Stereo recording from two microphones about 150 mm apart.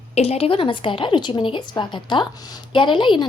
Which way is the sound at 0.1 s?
45° left (ahead or behind).